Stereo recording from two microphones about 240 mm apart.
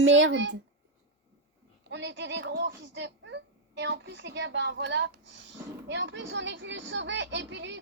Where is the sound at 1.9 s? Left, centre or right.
Right.